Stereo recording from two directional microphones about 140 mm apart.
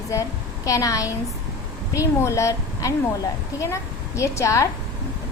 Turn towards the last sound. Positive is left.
turn(degrees=20)  # may be behind; listen again after turning